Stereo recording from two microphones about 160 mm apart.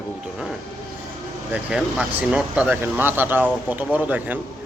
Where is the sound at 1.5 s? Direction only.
5° right (ahead or behind).